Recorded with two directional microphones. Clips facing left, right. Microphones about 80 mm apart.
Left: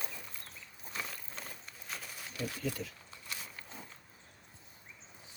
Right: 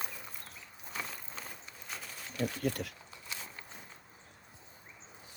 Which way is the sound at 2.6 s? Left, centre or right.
Right.